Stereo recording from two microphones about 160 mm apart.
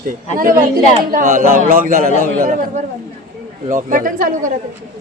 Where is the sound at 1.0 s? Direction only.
55° right (ahead or behind).